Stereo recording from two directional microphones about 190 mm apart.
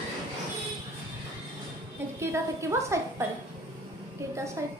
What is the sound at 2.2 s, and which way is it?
Speech, 15° right (ahead or behind).